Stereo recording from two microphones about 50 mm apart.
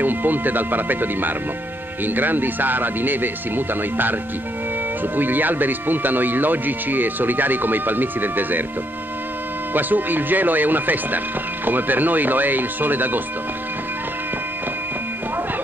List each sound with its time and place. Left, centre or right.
0.0 s speech: right
9.8 s speech: right